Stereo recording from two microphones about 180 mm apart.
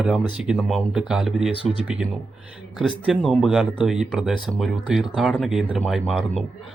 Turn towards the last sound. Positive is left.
turn(degrees=0)  # may be behind; listen again after turning